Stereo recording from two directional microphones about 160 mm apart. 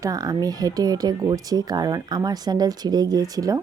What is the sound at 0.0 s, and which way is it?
Speech, 20° right (ahead or behind).